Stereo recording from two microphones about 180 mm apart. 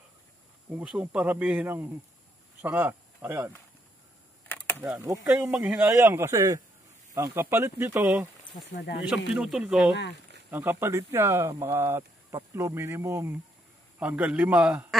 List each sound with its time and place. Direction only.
0.7 s speech: 5° right (ahead or behind)
4.7 s speech: 10° right (ahead or behind)
8.7 s speech: 70° left (ahead or behind)
9.1 s speech: centre (ahead or behind)